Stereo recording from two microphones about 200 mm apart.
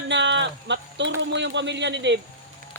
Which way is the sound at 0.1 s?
65° right (ahead or behind).